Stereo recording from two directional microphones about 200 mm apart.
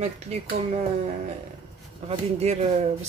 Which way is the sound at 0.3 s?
30° right (ahead or behind).